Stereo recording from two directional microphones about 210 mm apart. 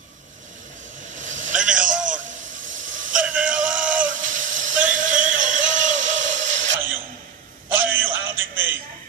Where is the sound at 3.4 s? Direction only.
40° right (ahead or behind).